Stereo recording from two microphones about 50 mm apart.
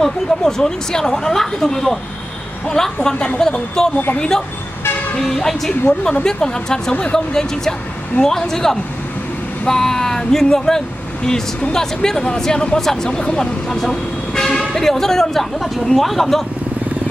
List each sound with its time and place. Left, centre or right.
0.0 s speech: centre
8.2 s speech: centre